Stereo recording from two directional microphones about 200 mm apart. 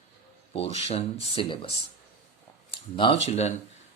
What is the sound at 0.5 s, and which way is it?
Speech, 30° left (ahead or behind).